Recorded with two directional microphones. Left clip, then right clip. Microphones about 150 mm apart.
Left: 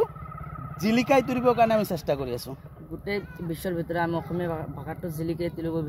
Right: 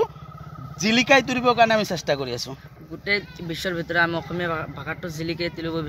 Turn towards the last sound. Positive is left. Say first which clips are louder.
# right 2 dB
turn(degrees=15)  # may be behind; listen again after turning